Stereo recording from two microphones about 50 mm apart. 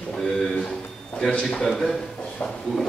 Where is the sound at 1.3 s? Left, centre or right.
Centre.